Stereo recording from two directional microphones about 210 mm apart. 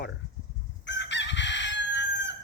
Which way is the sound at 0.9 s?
60° left (ahead or behind).